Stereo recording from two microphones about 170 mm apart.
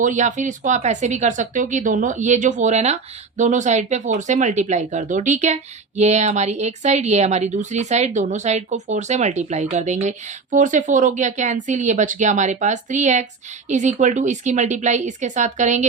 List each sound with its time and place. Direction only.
0.0 s speech: 45° right (ahead or behind)